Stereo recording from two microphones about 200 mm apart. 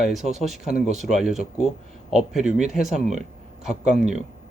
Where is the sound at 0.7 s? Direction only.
35° right (ahead or behind).